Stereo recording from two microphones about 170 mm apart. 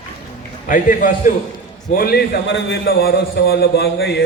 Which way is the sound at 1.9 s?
65° left (ahead or behind).